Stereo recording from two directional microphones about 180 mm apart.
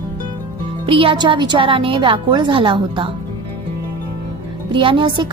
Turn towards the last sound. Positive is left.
turn(degrees=-25)  # may be behind; listen again after turning